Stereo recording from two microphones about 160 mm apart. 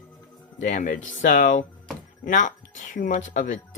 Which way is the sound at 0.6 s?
50° left (ahead or behind).